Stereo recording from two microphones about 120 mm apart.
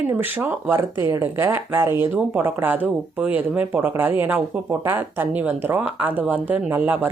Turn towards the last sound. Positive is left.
turn(degrees=-15)  # may be behind; listen again after turning